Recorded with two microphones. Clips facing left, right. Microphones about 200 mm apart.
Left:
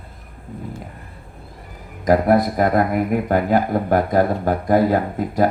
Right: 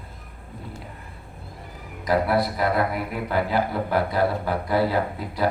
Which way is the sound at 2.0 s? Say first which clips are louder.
Left 6 dB; 45° left (ahead or behind).